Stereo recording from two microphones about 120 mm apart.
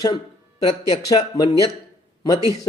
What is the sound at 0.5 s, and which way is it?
Speech, 50° left (ahead or behind).